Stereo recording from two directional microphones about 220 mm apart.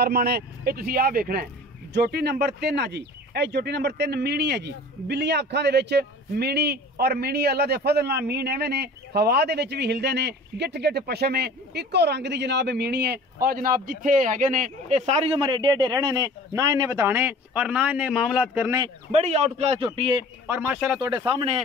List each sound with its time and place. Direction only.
0.0 s a man's voice: 45° right (ahead or behind); by 18.9 s 10° right (ahead or behind)
19.1 s a man's voice: 30° right (ahead or behind)
20.4 s a man's voice: 5° right (ahead or behind)
21.3 s a man's voice: 25° right (ahead or behind)